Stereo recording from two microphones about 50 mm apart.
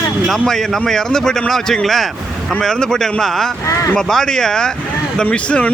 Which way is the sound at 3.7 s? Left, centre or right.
Left.